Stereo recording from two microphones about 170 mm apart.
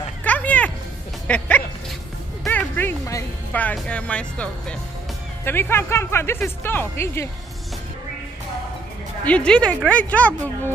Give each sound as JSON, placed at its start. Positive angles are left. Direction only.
{"t": 0.2, "sound": "a sound", "side_deg": 10}
{"t": 1.2, "sound": "speech", "side_deg": 10}
{"t": 2.4, "sound": "music", "side_deg": 10}
{"t": 5.4, "sound": "speech", "side_deg": 15}
{"t": 9.2, "sound": "speech", "side_deg": 5}